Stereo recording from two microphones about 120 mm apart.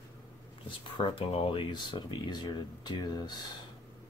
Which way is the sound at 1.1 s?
50° left (ahead or behind).